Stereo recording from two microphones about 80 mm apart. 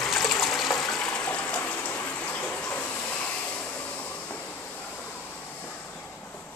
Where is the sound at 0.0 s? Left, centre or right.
Centre.